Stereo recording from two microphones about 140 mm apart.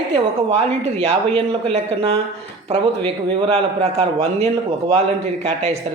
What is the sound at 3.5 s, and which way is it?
Speech, 50° right (ahead or behind).